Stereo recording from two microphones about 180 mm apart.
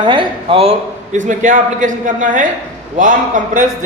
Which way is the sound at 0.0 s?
30° right (ahead or behind).